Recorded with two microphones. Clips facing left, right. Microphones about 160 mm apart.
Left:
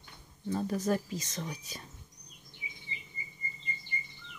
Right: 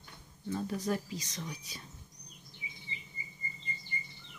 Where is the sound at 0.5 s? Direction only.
45° left (ahead or behind).